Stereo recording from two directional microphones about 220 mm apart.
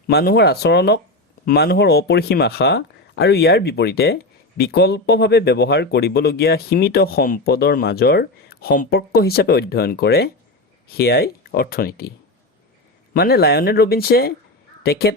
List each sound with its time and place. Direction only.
0.1 s speech: 45° left (ahead or behind)
13.1 s speech: 45° left (ahead or behind)